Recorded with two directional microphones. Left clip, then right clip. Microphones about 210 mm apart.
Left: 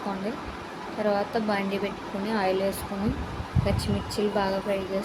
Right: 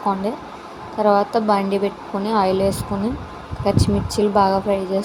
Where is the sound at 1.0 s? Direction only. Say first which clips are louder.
Right 10 dB; 30° right (ahead or behind).